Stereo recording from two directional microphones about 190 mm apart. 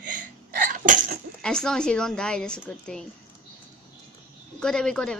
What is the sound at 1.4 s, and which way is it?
Speech, 5° left (ahead or behind).